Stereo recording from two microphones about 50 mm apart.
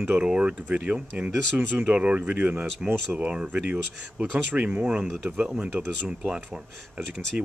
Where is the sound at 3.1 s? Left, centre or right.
Right.